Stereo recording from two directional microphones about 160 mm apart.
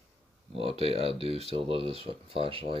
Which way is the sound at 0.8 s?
40° right (ahead or behind).